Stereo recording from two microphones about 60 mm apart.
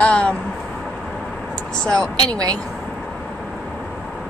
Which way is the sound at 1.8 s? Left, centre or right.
Centre.